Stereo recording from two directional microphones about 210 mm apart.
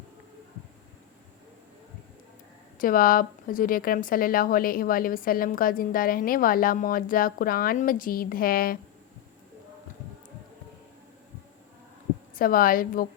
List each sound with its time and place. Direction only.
2.7 s a woman's voice: 40° left (ahead or behind)
12.4 s a woman's voice: 45° left (ahead or behind)